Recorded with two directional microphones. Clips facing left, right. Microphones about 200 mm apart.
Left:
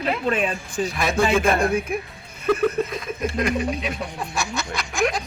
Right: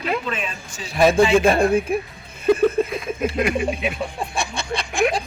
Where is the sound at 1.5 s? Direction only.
30° right (ahead or behind).